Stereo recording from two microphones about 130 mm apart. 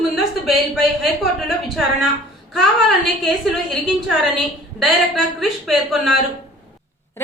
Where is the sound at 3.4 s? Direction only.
Centre (ahead or behind).